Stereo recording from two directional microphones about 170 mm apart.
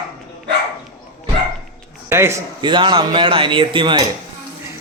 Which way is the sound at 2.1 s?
15° right (ahead or behind).